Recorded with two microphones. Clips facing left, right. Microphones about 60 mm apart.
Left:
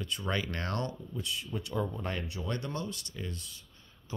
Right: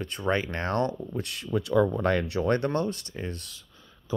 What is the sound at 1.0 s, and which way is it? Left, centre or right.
Speech, right.